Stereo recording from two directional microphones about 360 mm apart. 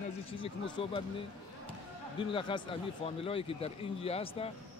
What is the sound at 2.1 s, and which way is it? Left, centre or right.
Speech, centre.